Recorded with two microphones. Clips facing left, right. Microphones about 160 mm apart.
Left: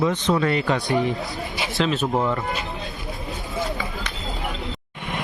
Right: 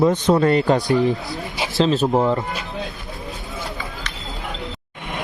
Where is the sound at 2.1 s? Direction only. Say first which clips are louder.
Right 4 dB; 20° right (ahead or behind).